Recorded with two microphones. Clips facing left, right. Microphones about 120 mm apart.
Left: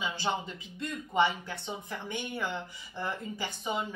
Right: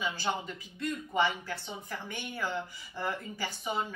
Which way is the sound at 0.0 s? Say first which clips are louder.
Left 1 dB; 25° left (ahead or behind).